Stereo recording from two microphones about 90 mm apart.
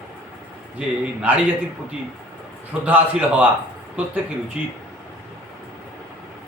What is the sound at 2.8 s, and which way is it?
Speech, 15° right (ahead or behind).